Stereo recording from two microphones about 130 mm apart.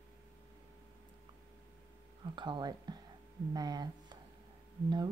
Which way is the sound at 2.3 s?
35° right (ahead or behind).